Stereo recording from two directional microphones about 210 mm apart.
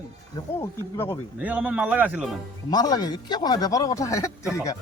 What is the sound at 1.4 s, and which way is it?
Speech, 5° right (ahead or behind).